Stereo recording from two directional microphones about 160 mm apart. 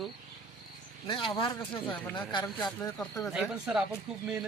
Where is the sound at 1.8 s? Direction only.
10° left (ahead or behind).